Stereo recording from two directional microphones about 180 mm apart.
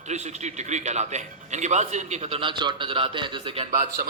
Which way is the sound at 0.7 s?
40° right (ahead or behind).